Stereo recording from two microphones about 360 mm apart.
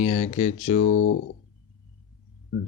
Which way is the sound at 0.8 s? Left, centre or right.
Left.